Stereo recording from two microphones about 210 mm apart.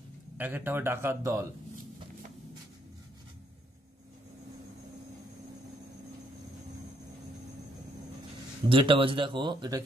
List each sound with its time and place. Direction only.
0.4 s speech: 10° right (ahead or behind)
8.6 s speech: 25° right (ahead or behind)